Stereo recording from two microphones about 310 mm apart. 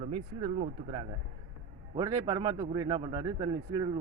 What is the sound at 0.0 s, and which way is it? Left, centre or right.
A man's voice, centre.